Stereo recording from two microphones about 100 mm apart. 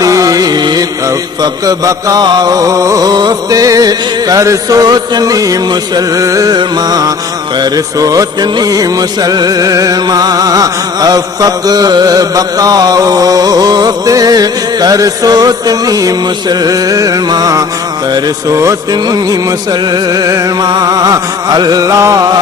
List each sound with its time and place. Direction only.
0.0 s music: 35° right (ahead or behind)